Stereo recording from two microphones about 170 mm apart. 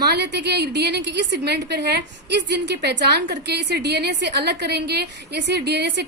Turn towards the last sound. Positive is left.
turn(degrees=-75)  # may be behind; listen again after turning